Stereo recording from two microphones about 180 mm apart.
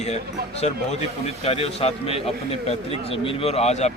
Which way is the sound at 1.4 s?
35° left (ahead or behind).